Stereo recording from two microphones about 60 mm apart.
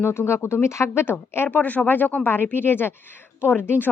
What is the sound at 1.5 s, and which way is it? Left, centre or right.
Speech, left.